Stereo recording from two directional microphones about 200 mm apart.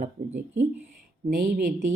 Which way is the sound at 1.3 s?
45° right (ahead or behind).